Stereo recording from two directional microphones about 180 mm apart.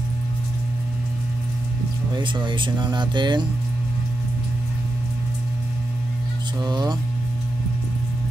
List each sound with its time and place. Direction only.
2.1 s speech: 25° right (ahead or behind)
6.6 s speech: 20° right (ahead or behind)